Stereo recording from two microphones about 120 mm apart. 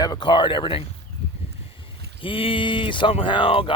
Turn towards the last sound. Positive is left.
turn(degrees=50)  # may be behind; listen again after turning